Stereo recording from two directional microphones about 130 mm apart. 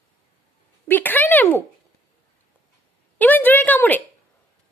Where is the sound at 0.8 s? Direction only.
15° left (ahead or behind).